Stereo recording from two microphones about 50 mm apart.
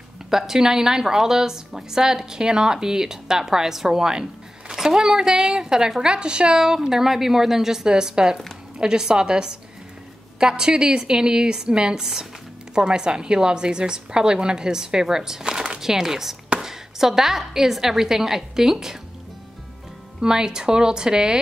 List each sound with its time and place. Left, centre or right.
0.3 s a woman's voice: centre
20.2 s a woman's voice: centre